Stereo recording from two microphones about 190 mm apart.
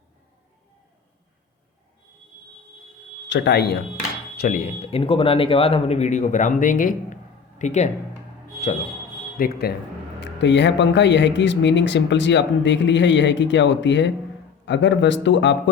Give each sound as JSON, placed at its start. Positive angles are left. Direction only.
{"t": 3.2, "sound": "speech", "side_deg": 70}
{"t": 4.4, "sound": "speech", "side_deg": 45}
{"t": 9.4, "sound": "speech", "side_deg": 55}
{"t": 10.2, "sound": "speech", "side_deg": 70}